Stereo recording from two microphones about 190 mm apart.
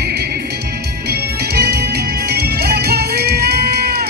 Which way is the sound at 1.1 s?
55° right (ahead or behind).